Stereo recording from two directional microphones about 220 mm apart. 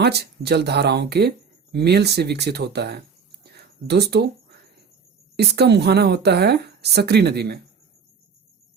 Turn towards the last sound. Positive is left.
turn(degrees=-50)  # may be behind; listen again after turning